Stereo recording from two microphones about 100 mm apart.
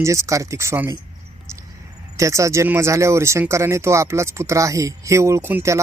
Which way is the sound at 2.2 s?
30° right (ahead or behind).